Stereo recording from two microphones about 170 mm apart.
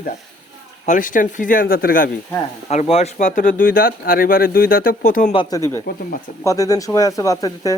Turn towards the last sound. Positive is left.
turn(degrees=20)  # may be behind; listen again after turning